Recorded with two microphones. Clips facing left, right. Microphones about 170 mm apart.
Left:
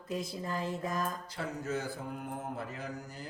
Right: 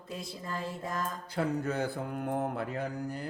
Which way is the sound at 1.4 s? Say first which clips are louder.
Right 6 dB; 60° right (ahead or behind).